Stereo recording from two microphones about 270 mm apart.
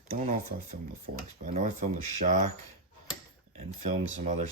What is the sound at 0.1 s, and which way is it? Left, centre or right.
Cutlery, right.